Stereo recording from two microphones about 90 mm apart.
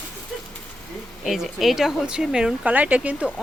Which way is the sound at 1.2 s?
Centre (ahead or behind).